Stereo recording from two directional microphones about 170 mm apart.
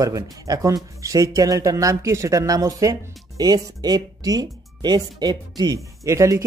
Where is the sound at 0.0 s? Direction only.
20° right (ahead or behind).